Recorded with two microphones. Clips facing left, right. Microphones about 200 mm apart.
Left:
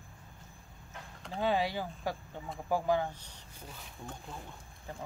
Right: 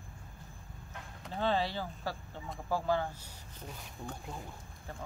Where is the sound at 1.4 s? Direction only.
15° left (ahead or behind).